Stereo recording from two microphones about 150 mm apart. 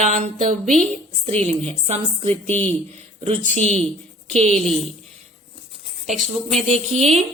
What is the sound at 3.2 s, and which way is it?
Speech, 40° right (ahead or behind).